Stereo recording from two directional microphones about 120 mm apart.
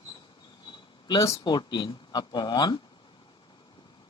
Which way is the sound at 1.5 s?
40° left (ahead or behind).